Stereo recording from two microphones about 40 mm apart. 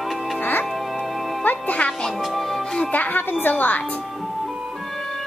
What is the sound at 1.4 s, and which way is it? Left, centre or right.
Music, left.